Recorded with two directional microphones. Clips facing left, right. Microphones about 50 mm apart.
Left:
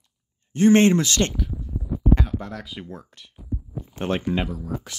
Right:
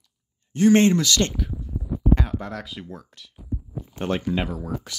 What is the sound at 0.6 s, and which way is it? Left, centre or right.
Speech, left.